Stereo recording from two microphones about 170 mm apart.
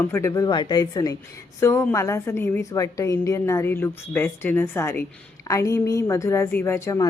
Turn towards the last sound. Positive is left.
turn(degrees=20)  # may be behind; listen again after turning